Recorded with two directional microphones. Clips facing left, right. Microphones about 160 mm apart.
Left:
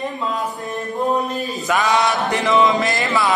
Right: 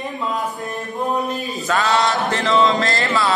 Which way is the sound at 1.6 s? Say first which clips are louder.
Even; 15° left (ahead or behind).